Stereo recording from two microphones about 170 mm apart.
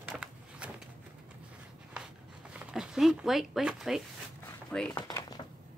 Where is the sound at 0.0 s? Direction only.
5° right (ahead or behind).